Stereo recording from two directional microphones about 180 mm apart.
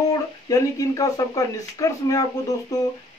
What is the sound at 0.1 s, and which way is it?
Speech, 20° left (ahead or behind).